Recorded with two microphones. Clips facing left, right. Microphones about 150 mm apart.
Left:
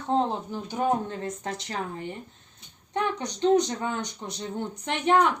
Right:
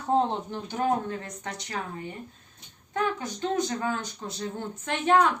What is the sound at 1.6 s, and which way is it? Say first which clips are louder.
Speech: left 2 dB; 30° left (ahead or behind).